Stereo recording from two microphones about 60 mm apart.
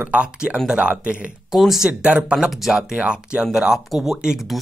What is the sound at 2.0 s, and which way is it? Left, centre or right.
Speech, centre.